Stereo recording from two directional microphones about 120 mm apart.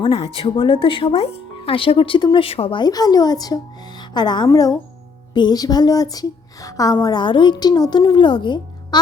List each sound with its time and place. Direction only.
0.0 s speech: 50° left (ahead or behind)